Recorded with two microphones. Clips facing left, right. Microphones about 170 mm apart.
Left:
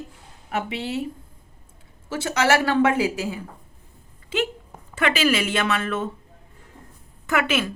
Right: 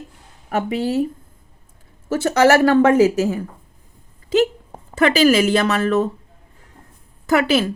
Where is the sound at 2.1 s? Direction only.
45° right (ahead or behind).